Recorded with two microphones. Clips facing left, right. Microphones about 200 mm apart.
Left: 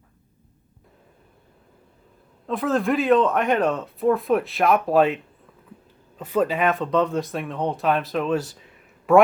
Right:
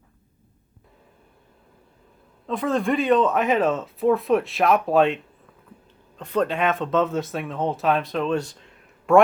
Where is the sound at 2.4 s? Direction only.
Centre (ahead or behind).